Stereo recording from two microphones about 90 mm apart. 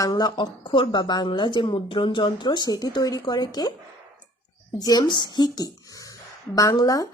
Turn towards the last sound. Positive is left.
turn(degrees=40)  # may be behind; listen again after turning